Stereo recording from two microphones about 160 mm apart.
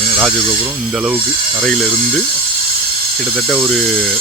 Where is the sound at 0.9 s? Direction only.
5° right (ahead or behind).